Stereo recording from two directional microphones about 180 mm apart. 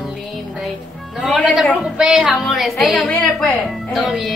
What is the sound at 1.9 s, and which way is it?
Speech, 5° right (ahead or behind).